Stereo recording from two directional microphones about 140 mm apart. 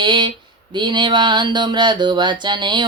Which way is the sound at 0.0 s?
35° right (ahead or behind).